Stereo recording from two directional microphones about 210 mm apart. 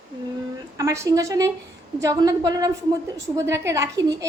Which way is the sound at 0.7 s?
15° right (ahead or behind).